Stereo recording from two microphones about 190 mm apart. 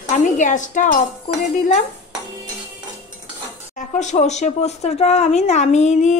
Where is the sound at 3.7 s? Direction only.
40° left (ahead or behind).